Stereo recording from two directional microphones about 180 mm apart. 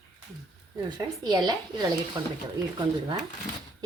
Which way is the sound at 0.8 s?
25° right (ahead or behind).